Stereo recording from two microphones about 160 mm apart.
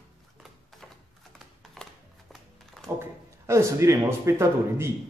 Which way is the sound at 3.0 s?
20° right (ahead or behind).